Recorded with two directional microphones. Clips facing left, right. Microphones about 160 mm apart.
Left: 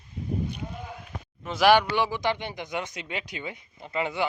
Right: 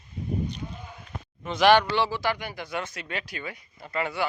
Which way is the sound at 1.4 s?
5° left (ahead or behind).